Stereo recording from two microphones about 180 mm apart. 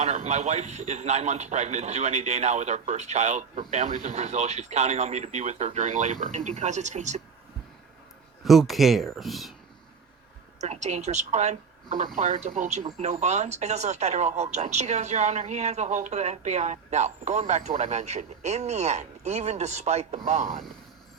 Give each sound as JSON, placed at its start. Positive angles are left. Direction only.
{"t": 0.0, "sound": "speech", "side_deg": -40}
{"t": 8.4, "sound": "speech", "side_deg": 0}
{"t": 10.6, "sound": "speech", "side_deg": -40}